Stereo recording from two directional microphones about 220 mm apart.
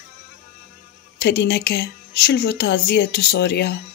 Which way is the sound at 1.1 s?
50° left (ahead or behind).